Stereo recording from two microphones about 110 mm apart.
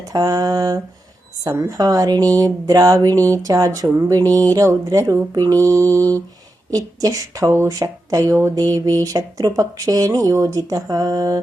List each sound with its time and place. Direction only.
0.0 s speech: 30° right (ahead or behind)